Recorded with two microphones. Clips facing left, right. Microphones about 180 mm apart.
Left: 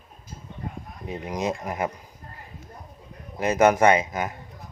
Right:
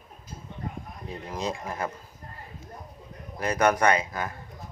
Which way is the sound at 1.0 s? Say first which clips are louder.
Left 4 dB; 20° left (ahead or behind).